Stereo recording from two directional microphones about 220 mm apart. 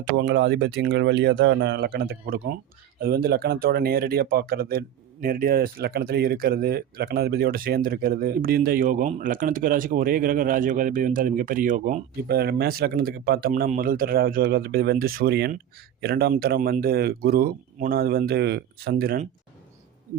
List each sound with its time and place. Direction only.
0.0 s speech: 50° right (ahead or behind)